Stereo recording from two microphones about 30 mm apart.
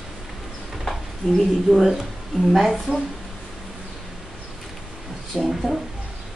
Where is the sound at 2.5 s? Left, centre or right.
Centre.